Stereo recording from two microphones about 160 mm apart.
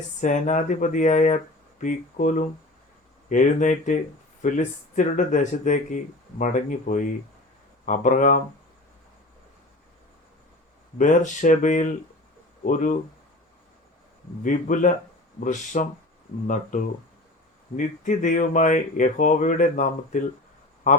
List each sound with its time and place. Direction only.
0.2 s speech: 50° left (ahead or behind)
10.9 s speech: 55° left (ahead or behind)
14.4 s speech: 55° left (ahead or behind)